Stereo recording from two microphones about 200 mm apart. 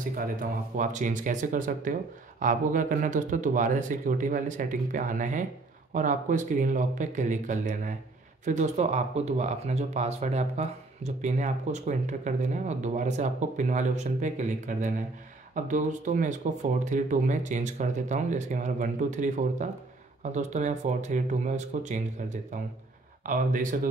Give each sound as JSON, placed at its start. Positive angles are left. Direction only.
{"t": 0.0, "sound": "speech", "side_deg": -45}